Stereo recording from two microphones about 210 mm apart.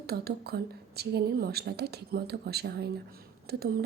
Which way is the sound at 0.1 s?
50° right (ahead or behind).